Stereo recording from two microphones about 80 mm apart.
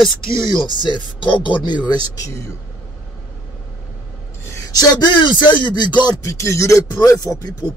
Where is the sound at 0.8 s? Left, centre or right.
Left.